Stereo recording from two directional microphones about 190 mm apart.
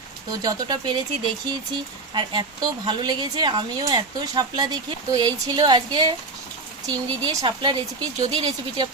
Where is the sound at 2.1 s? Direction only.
25° right (ahead or behind).